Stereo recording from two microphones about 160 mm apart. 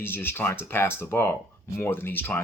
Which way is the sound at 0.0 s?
15° left (ahead or behind).